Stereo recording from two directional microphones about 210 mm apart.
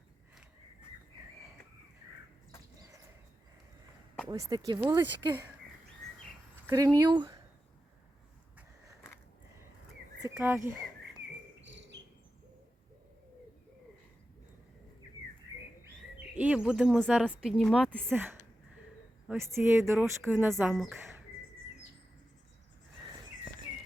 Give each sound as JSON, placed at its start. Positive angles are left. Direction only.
{"t": 4.3, "sound": "speech", "side_deg": -20}
{"t": 6.7, "sound": "speech", "side_deg": -15}
{"t": 8.5, "sound": "a sound", "side_deg": -15}
{"t": 10.2, "sound": "speech", "side_deg": -10}
{"t": 11.6, "sound": "cricket", "side_deg": -60}
{"t": 16.3, "sound": "speech", "side_deg": -5}